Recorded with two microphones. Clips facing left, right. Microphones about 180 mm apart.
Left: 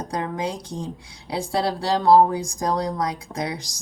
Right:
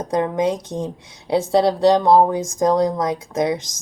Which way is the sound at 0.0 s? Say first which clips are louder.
Right 7 dB; 20° right (ahead or behind).